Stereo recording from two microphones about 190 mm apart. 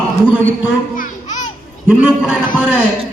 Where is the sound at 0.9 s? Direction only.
40° left (ahead or behind).